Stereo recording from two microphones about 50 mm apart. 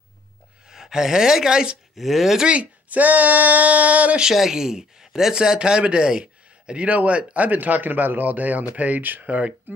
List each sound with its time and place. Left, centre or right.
0.7 s speech: centre
2.0 s speech: centre
2.4 s speech: right
4.2 s speech: centre; by 9.8 s right